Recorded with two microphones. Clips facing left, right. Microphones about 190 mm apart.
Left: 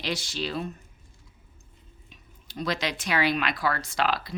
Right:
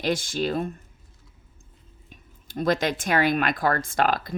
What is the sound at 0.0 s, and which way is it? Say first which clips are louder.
Speech: right 6 dB; 50° right (ahead or behind).